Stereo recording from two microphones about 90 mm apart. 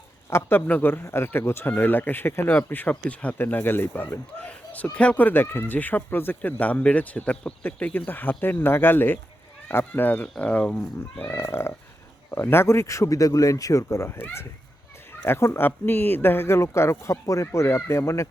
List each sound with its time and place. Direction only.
0.3 s speech: 30° left (ahead or behind)
11.3 s speech: 30° left (ahead or behind)